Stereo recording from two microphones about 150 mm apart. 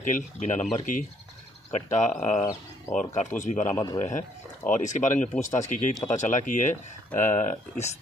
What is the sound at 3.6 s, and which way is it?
Speech, 20° left (ahead or behind).